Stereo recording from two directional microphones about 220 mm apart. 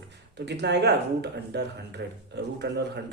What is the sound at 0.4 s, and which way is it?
A man's voice, 50° right (ahead or behind).